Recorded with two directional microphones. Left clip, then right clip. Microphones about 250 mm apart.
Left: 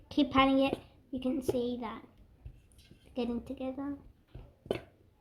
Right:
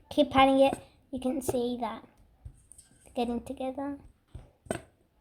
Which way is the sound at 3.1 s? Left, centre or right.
Right.